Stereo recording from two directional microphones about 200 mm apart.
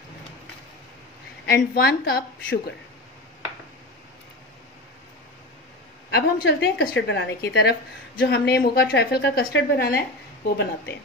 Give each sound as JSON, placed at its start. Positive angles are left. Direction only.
{"t": 1.4, "sound": "a woman's voice", "side_deg": 50}
{"t": 6.4, "sound": "a woman's voice", "side_deg": 55}